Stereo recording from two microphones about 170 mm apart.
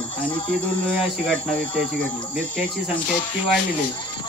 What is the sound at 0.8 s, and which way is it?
Speech, 5° left (ahead or behind).